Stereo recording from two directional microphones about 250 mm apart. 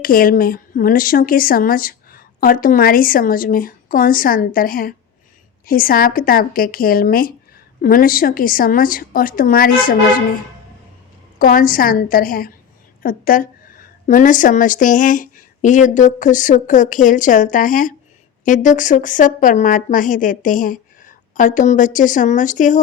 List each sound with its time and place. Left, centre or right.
0.0 s speech: left
11.3 s speech: left